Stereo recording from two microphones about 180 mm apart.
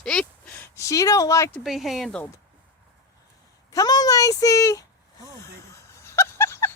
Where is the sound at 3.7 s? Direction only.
20° left (ahead or behind).